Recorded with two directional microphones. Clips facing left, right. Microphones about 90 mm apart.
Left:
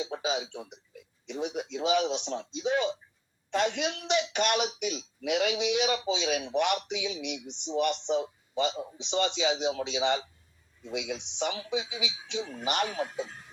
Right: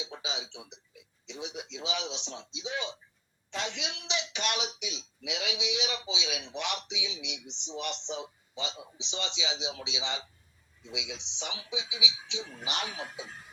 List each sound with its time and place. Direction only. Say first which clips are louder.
0.0 s speech: left 8 dB; 50° left (ahead or behind)